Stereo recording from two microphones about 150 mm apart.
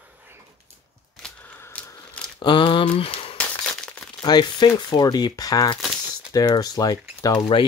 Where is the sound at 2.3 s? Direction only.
35° left (ahead or behind).